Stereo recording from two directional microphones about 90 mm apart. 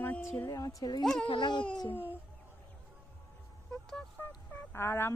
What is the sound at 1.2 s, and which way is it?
Speech, 65° left (ahead or behind).